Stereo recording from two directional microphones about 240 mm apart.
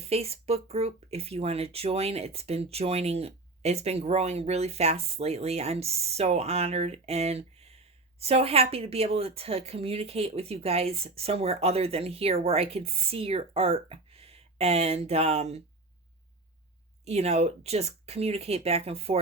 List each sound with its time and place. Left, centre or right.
0.0 s speech: right
17.1 s speech: right